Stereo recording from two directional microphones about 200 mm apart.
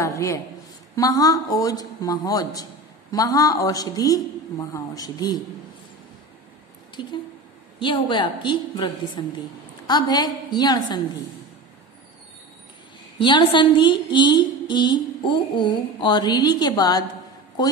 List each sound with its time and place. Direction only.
0.0 s a man's voice: 15° left (ahead or behind)
7.0 s a woman's voice: 25° left (ahead or behind)
13.2 s a woman's voice: 25° left (ahead or behind)